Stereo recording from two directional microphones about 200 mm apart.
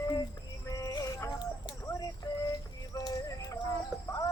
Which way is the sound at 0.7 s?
20° left (ahead or behind).